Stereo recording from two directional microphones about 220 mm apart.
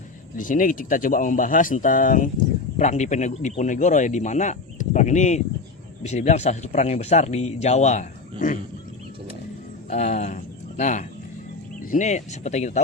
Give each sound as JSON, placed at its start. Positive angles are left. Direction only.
{"t": 0.3, "sound": "a man's voice", "side_deg": 35}
{"t": 9.9, "sound": "a man's voice", "side_deg": 30}